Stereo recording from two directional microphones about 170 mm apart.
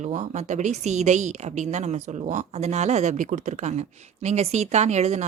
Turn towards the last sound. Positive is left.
turn(degrees=-40)  # may be behind; listen again after turning